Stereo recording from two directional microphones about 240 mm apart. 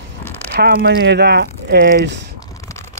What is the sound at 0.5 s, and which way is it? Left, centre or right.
Speech, right.